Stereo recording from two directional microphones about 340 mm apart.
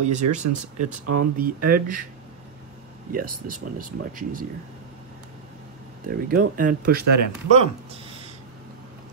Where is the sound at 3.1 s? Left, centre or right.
Right.